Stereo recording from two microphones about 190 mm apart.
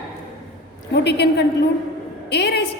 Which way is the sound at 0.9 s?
60° left (ahead or behind).